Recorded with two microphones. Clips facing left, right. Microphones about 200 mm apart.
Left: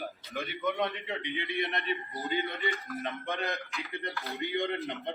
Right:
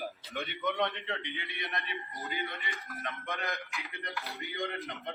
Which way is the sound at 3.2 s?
30° left (ahead or behind).